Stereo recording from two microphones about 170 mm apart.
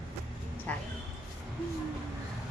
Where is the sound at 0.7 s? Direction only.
10° left (ahead or behind).